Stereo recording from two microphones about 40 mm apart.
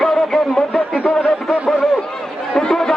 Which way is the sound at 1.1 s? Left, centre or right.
Left.